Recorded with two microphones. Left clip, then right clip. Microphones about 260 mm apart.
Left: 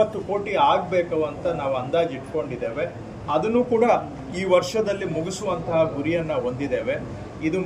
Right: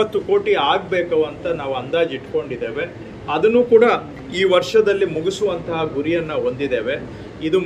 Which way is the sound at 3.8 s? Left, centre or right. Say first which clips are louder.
Right 5 dB; centre.